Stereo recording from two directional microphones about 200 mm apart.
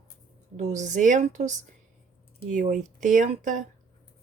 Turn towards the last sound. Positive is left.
turn(degrees=-40)  # may be behind; listen again after turning